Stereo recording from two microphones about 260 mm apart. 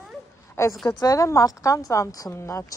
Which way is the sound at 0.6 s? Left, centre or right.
Centre.